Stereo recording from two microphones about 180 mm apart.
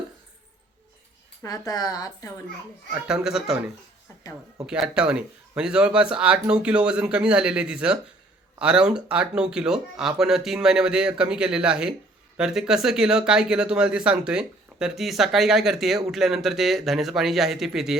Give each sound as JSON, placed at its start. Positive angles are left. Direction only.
{"t": 1.4, "sound": "speech", "side_deg": 20}
{"t": 2.9, "sound": "speech", "side_deg": -5}
{"t": 4.6, "sound": "speech", "side_deg": -5}